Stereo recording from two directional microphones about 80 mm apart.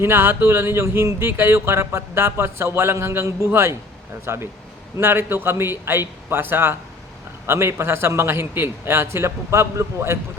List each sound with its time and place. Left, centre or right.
0.0 s a man's voice: right